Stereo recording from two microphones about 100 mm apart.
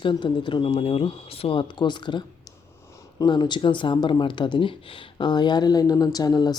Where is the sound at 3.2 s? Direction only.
45° left (ahead or behind).